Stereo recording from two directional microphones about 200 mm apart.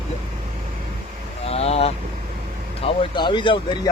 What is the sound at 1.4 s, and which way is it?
Speech, 30° left (ahead or behind).